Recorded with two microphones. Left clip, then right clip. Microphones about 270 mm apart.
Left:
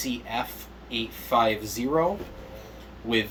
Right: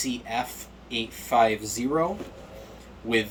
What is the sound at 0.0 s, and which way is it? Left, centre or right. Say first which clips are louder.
Speech: right 1 dB; centre.